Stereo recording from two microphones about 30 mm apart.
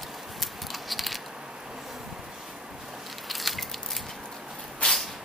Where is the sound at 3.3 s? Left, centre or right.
Centre.